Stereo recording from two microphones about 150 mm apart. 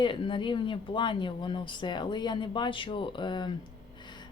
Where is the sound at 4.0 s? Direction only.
30° left (ahead or behind).